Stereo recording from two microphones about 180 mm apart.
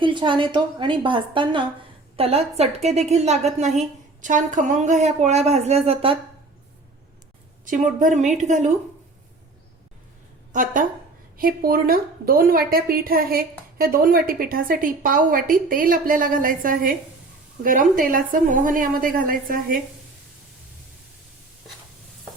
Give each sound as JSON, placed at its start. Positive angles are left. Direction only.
{"t": 0.0, "sound": "a woman's voice", "side_deg": -25}
{"t": 7.6, "sound": "a woman's voice", "side_deg": -45}
{"t": 10.5, "sound": "a woman's voice", "side_deg": -50}